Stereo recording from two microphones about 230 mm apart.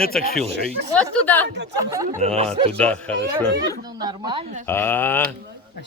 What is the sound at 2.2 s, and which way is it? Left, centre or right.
Speech, right.